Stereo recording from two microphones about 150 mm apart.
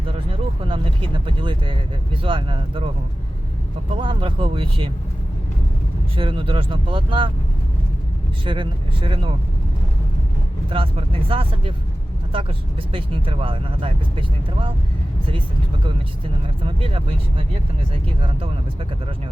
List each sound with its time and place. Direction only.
0.3 s speech: 35° right (ahead or behind)
3.9 s speech: 35° right (ahead or behind)
6.1 s speech: 35° right (ahead or behind)
8.4 s speech: 35° right (ahead or behind)
10.7 s speech: 35° right (ahead or behind)
16.6 s speech: 35° right (ahead or behind)